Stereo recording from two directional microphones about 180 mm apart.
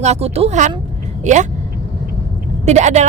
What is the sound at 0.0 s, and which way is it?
A woman's voice, 35° right (ahead or behind).